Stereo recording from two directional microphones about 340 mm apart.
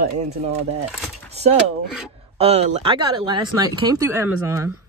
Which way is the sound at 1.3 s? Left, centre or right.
Centre.